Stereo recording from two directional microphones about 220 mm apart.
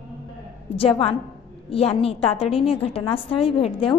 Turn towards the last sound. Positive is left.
turn(degrees=25)  # may be behind; listen again after turning